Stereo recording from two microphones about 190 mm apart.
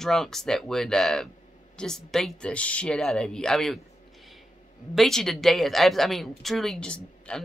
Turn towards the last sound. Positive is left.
turn(degrees=5)  # may be behind; listen again after turning